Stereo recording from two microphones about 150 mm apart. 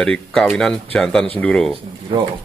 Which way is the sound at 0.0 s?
5° left (ahead or behind).